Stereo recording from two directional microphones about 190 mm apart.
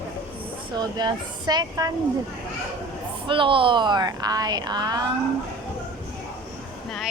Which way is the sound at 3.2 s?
25° right (ahead or behind).